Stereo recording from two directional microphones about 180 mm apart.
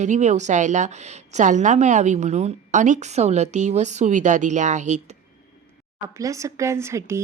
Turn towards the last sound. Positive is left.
turn(degrees=-15)  # may be behind; listen again after turning